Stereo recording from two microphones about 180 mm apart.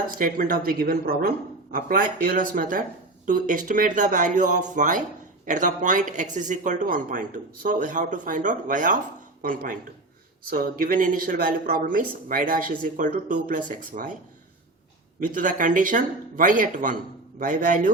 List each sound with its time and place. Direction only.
0.1 s speech: 50° right (ahead or behind)
15.4 s speech: 45° right (ahead or behind)